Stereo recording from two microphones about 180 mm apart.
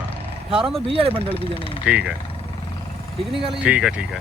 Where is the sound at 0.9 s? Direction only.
30° right (ahead or behind).